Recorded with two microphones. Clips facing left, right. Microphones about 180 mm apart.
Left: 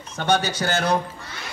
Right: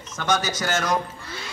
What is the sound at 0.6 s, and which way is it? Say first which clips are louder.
Speech: left 2 dB; 30° left (ahead or behind).